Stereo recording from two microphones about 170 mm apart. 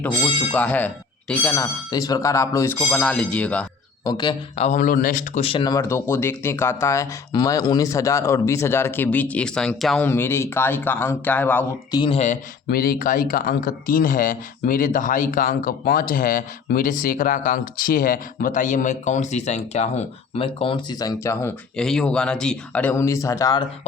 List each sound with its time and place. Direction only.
0.5 s speech: 10° left (ahead or behind)
2.9 s speech: 5° left (ahead or behind)
4.0 s speech: 25° left (ahead or behind)
4.6 s speech: 45° left (ahead or behind)
5.5 s speech: 25° left (ahead or behind); by 11.6 s 10° left (ahead or behind)
11.9 s speech: 30° left (ahead or behind)
12.6 s speech: 60° left (ahead or behind); by 21.5 s 20° left (ahead or behind)
21.8 s speech: 5° left (ahead or behind); by 23.6 s 20° left (ahead or behind)